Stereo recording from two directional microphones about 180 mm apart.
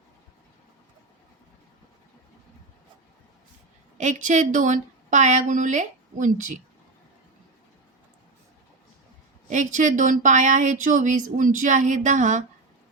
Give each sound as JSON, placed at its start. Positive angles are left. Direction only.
{"t": 3.9, "sound": "a woman's voice", "side_deg": -40}
{"t": 9.5, "sound": "speech", "side_deg": -45}